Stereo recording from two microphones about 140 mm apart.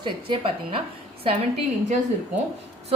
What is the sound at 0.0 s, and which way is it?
Speech, 35° right (ahead or behind).